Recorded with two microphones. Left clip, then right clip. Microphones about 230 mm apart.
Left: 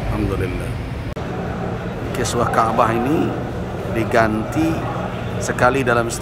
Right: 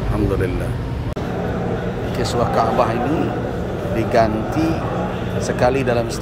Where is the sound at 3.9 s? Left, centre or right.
Centre.